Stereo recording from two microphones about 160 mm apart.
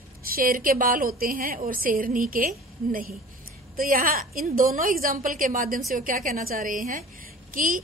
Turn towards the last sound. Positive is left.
turn(degrees=-60)  # may be behind; listen again after turning